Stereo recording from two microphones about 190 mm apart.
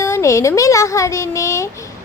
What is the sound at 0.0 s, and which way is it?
A woman's voice, 15° left (ahead or behind).